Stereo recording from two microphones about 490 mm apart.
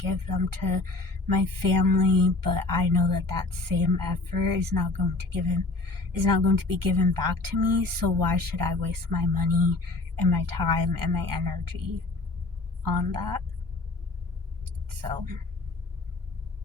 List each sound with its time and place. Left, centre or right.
0.0 s speech: right
12.8 s speech: right